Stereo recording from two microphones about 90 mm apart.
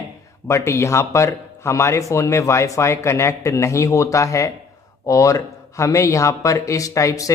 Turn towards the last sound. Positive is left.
turn(degrees=35)  # may be behind; listen again after turning